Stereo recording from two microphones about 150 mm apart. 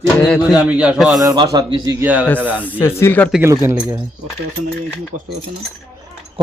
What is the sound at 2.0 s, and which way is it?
Speech, 10° right (ahead or behind).